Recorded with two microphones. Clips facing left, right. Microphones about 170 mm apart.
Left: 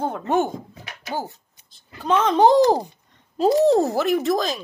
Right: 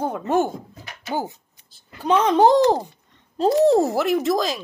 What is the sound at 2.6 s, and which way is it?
A child's voice, 10° left (ahead or behind).